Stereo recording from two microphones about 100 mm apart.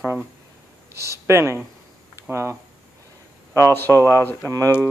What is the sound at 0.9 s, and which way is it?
Speech, 25° right (ahead or behind).